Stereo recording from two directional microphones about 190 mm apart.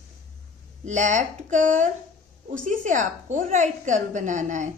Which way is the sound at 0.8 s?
40° right (ahead or behind).